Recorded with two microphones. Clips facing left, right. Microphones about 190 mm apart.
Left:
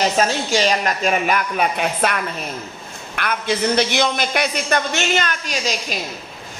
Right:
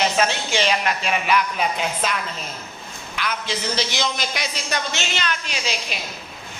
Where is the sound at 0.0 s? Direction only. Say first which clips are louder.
Left 3 dB; 40° left (ahead or behind).